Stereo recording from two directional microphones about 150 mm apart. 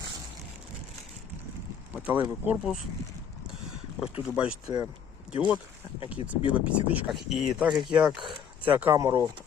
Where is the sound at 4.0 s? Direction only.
5° right (ahead or behind).